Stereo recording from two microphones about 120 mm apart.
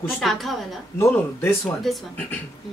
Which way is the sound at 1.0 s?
20° left (ahead or behind).